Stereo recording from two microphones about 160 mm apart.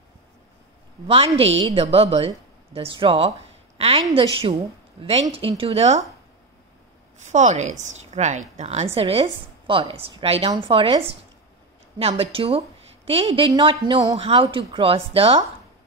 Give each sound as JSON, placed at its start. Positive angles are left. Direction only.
{"t": 1.0, "sound": "a woman's voice", "side_deg": -35}
{"t": 7.2, "sound": "a woman's voice", "side_deg": -45}
{"t": 8.9, "sound": "a woman's voice", "side_deg": -35}